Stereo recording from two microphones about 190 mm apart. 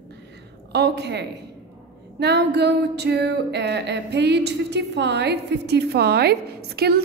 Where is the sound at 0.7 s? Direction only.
60° right (ahead or behind).